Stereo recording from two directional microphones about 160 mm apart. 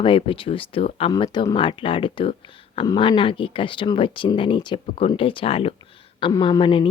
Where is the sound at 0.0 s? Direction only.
35° left (ahead or behind).